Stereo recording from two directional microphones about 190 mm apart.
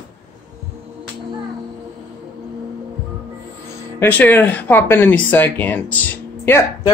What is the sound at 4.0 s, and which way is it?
Speech, 10° left (ahead or behind).